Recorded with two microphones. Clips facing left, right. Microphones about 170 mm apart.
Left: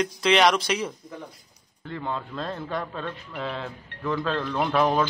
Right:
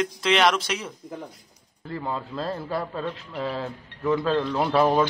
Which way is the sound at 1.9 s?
5° right (ahead or behind).